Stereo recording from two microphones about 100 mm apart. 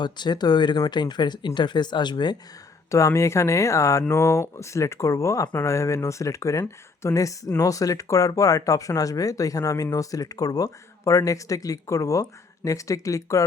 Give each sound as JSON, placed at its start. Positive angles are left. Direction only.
{"t": 0.0, "sound": "speech", "side_deg": 45}
{"t": 2.9, "sound": "speech", "side_deg": 30}